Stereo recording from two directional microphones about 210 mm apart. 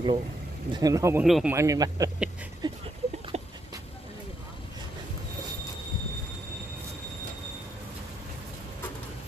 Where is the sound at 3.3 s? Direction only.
30° right (ahead or behind).